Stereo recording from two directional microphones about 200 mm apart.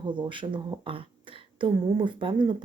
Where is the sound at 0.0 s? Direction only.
25° right (ahead or behind).